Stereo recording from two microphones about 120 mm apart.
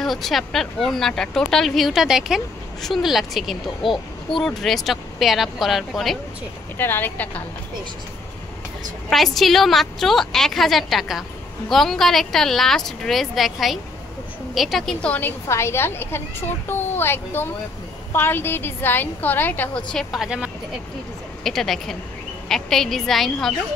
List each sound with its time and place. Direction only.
0.0 s speech: centre (ahead or behind)
6.8 s a woman's voice: 15° left (ahead or behind)
9.1 s a woman's voice: centre (ahead or behind)
21.5 s speech: centre (ahead or behind)